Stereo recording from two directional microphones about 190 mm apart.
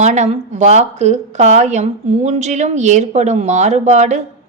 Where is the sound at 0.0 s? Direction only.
35° right (ahead or behind).